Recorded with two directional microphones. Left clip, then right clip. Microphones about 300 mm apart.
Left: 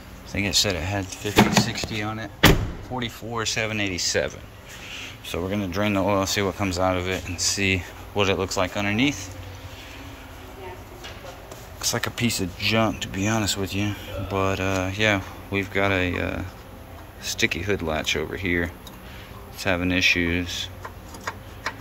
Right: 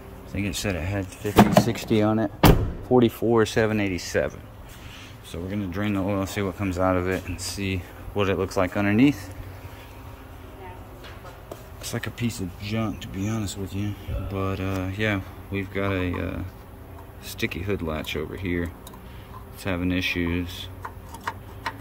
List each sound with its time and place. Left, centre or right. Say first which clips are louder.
0.3 s speech: left 6 dB; centre
1.3 s speech: right 1 dB; right
11.8 s speech: left 7 dB; centre